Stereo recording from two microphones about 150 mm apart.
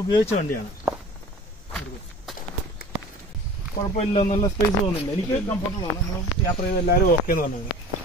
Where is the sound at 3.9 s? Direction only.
45° left (ahead or behind).